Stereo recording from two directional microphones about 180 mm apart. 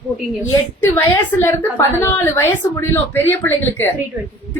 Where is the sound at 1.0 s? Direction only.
15° left (ahead or behind).